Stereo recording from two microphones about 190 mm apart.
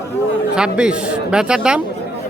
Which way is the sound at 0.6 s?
5° right (ahead or behind).